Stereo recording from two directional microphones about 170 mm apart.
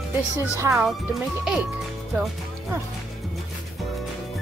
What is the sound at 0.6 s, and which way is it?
Speech, 15° right (ahead or behind).